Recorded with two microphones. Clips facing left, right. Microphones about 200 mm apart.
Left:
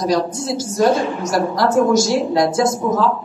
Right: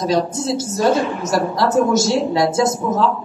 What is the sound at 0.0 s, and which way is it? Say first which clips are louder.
A woman's voice: even; 25° right (ahead or behind).